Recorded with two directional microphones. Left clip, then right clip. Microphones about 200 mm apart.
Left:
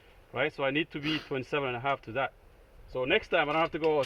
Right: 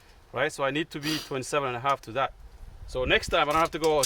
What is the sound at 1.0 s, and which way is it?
Speech, 5° right (ahead or behind).